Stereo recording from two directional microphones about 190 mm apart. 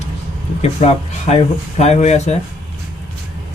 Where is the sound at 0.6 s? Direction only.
35° left (ahead or behind).